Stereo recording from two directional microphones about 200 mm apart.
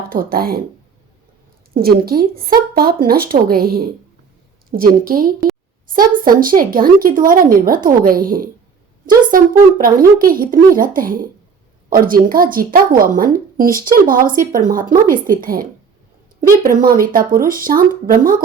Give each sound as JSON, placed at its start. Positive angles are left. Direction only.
{"t": 0.1, "sound": "a woman's voice", "side_deg": -45}
{"t": 1.7, "sound": "a woman's voice", "side_deg": -50}